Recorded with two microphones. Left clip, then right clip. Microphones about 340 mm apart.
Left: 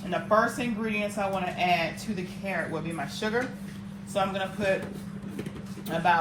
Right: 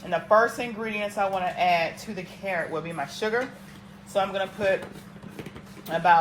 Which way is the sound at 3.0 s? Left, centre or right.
Right.